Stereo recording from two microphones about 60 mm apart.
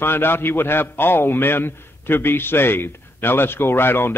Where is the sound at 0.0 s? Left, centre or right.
Left.